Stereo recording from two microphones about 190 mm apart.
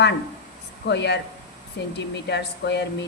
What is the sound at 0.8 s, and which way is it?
Speech, 65° left (ahead or behind).